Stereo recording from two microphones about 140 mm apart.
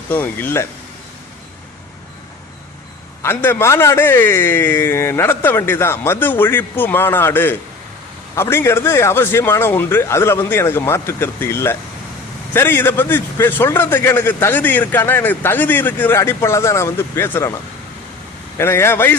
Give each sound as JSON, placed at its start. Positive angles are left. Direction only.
{"t": 0.1, "sound": "speech", "side_deg": 15}
{"t": 3.2, "sound": "speech", "side_deg": 15}